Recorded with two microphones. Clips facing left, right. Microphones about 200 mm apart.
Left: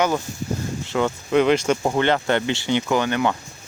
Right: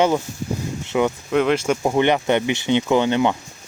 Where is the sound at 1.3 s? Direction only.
Centre (ahead or behind).